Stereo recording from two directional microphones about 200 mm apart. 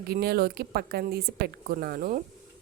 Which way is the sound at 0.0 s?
50° right (ahead or behind).